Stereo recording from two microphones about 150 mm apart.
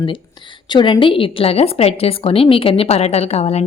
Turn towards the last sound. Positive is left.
turn(degrees=45)  # may be behind; listen again after turning